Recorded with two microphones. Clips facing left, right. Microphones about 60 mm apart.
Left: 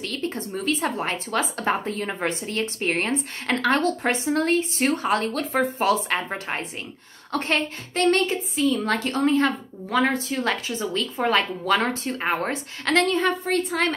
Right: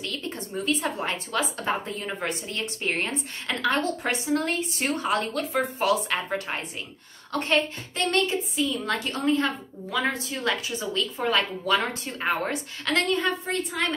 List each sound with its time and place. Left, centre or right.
0.0 s a sound: left
1.0 s a woman's voice: left
1.6 s a woman's voice: left
7.3 s a woman's voice: left